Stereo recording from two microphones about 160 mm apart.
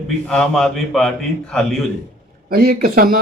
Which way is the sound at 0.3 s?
Centre (ahead or behind).